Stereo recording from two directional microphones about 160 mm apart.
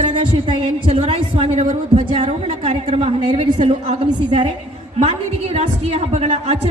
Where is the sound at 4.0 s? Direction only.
35° right (ahead or behind).